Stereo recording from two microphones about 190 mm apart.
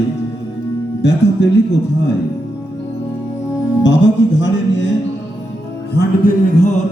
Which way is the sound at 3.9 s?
75° left (ahead or behind).